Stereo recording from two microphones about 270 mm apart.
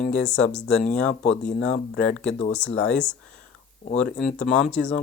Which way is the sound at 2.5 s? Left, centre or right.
Centre.